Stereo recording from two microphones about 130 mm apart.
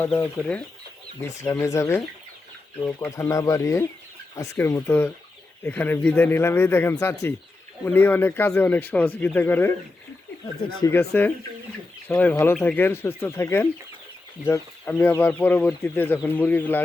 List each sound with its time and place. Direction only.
0.2 s speech: 10° left (ahead or behind)
1.5 s speech: 20° left (ahead or behind)
3.1 s speech: 25° left (ahead or behind)
10.9 s speech: 15° left (ahead or behind)